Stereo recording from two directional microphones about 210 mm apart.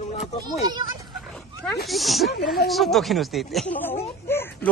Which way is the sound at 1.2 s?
Centre (ahead or behind).